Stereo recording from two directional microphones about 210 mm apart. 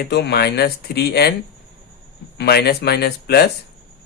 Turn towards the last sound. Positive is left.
turn(degrees=50)  # may be behind; listen again after turning